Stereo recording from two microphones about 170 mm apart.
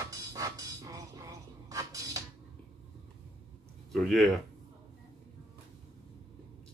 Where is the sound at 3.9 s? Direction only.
Centre (ahead or behind).